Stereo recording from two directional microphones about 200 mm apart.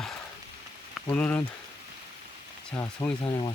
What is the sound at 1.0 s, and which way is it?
Speech, 5° left (ahead or behind).